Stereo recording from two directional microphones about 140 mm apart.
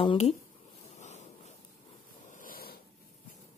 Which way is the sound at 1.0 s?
55° left (ahead or behind).